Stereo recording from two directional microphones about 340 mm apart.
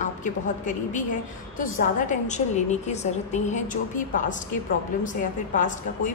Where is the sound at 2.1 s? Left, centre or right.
Left.